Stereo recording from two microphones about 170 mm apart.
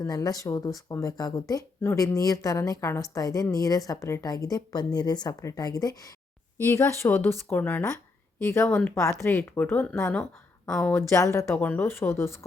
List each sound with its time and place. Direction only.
0.0 s a woman's voice: 20° left (ahead or behind); by 10.9 s 5° left (ahead or behind)
10.9 s a woman's voice: 15° left (ahead or behind)